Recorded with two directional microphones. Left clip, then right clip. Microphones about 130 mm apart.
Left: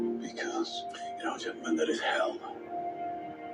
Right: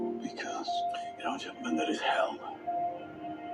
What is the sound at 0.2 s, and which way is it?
Music, 35° right (ahead or behind).